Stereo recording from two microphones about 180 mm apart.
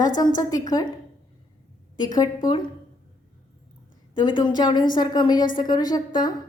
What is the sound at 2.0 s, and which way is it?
Speech, 20° left (ahead or behind).